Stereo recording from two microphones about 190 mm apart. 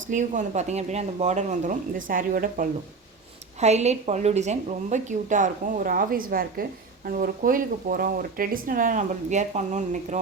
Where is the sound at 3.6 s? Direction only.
35° right (ahead or behind).